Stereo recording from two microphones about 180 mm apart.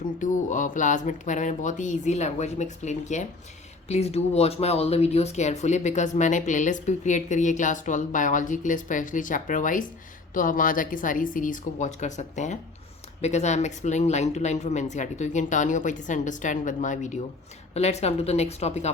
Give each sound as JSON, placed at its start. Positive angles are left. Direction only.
{"t": 0.2, "sound": "speech", "side_deg": 45}